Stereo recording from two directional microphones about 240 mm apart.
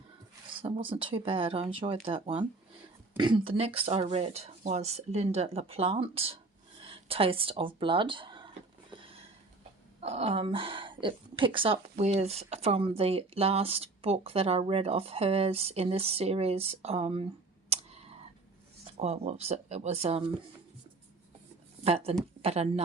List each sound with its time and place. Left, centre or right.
0.5 s a woman's voice: right
10.0 s a woman's voice: right
17.7 s clicking: right
18.9 s a woman's voice: right
21.8 s a woman's voice: right